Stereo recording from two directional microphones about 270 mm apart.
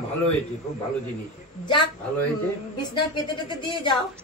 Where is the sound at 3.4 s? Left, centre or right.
Centre.